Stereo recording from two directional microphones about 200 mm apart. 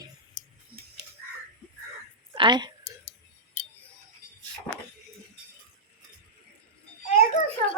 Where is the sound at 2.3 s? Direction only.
25° right (ahead or behind).